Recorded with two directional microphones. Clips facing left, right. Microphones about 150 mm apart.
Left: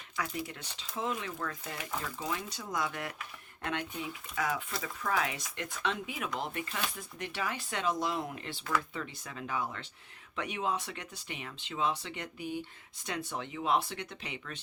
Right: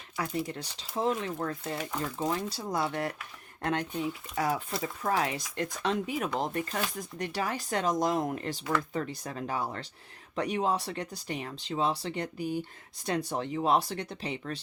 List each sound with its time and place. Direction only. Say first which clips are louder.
0.2 s speech: right 5 dB; 35° right (ahead or behind)